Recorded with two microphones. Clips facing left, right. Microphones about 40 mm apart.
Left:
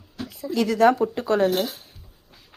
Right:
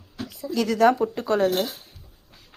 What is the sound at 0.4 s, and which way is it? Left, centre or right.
Speech, left.